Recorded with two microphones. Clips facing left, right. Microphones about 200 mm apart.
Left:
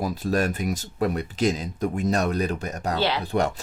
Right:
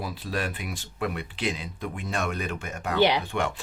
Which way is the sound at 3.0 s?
15° right (ahead or behind).